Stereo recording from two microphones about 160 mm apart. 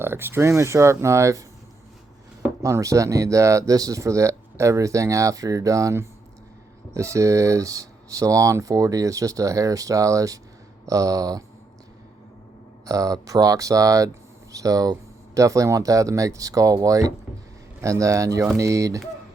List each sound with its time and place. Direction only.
0.0 s speech: 15° right (ahead or behind)
2.6 s speech: 20° right (ahead or behind)
12.8 s speech: 20° right (ahead or behind)